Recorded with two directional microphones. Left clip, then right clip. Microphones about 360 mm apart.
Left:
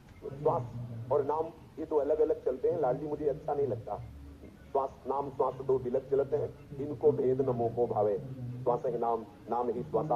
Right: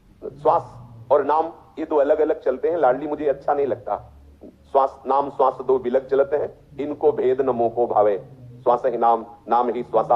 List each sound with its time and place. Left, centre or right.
1.1 s a man's voice: right